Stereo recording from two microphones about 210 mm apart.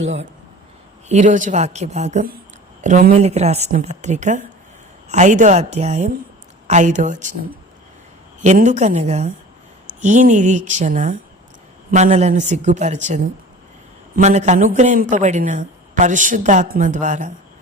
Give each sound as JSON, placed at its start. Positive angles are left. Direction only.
{"t": 1.0, "sound": "speech", "side_deg": -35}